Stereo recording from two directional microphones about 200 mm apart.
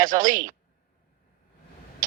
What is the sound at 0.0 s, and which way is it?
Speech, 45° right (ahead or behind).